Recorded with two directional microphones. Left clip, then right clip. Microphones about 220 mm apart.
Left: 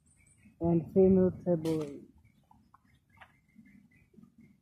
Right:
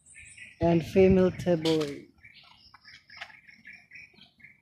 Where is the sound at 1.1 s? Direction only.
55° right (ahead or behind).